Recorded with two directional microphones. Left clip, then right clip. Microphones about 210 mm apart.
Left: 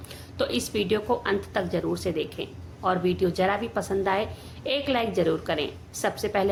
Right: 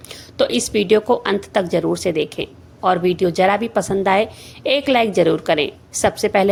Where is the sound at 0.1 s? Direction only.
30° right (ahead or behind).